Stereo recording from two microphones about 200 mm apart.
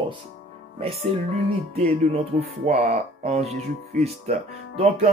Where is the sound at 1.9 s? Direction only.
30° right (ahead or behind).